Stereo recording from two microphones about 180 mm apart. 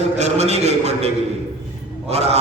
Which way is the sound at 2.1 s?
35° right (ahead or behind).